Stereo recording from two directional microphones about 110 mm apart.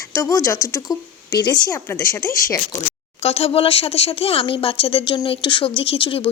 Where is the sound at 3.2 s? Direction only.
65° left (ahead or behind).